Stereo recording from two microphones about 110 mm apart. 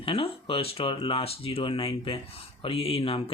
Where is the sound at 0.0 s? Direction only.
55° left (ahead or behind).